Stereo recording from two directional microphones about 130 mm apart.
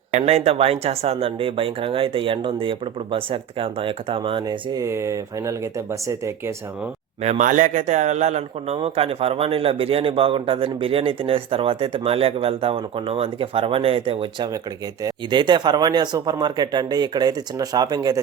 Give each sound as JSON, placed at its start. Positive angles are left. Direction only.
{"t": 0.1, "sound": "a man's voice", "side_deg": -60}
{"t": 7.2, "sound": "a man's voice", "side_deg": -65}